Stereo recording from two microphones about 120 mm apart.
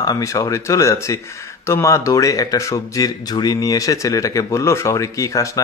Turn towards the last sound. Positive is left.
turn(degrees=30)  # may be behind; listen again after turning